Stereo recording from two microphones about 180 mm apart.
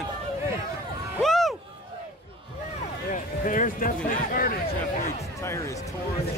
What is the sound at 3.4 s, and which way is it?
Speech, 45° left (ahead or behind).